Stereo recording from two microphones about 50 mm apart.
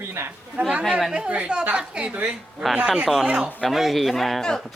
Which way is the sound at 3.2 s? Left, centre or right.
Right.